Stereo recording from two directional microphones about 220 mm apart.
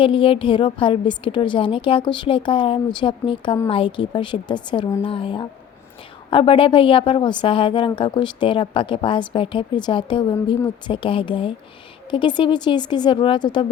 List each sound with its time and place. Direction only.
0.0 s a woman's voice: 25° left (ahead or behind)